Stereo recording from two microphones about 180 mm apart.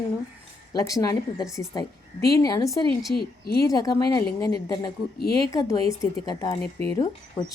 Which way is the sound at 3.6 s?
20° left (ahead or behind).